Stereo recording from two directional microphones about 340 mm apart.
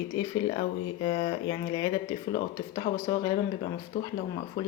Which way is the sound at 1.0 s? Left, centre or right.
Centre.